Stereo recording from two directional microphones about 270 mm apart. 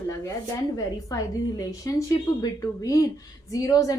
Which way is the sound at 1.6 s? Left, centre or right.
Centre.